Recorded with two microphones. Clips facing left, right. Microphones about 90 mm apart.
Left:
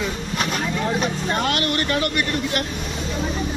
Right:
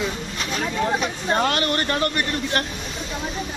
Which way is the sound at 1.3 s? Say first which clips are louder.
Right 4 dB; 30° right (ahead or behind).